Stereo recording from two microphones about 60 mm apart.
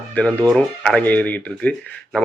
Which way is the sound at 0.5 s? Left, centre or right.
Centre.